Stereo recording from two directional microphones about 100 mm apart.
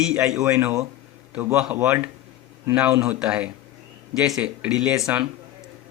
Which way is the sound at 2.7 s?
10° right (ahead or behind).